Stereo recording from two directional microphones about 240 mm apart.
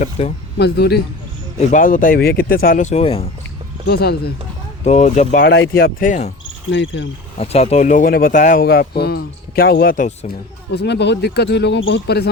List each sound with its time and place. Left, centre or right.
0.0 s speech: left
0.5 s speech: left
3.8 s speech: left
4.8 s speech: left
5.5 s speech: left
6.7 s speech: left
7.3 s speech: left